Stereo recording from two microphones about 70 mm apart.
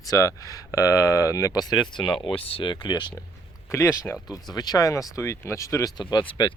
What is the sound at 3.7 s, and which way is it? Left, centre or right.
Speech, left.